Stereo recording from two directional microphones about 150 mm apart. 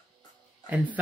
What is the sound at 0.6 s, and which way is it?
Speech, 10° right (ahead or behind).